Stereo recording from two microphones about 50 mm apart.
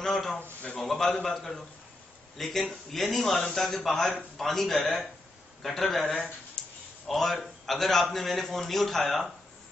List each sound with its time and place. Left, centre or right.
0.0 s a sound: centre
0.4 s a man's voice: left
0.7 s a sound: centre
1.2 s a man's voice: centre
6.1 s speech: centre
7.1 s a man's voice: centre